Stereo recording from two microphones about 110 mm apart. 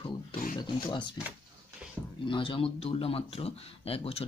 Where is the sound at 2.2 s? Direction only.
50° left (ahead or behind).